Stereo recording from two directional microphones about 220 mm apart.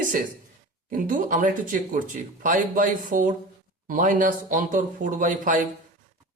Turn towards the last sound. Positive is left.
turn(degrees=-35)  # may be behind; listen again after turning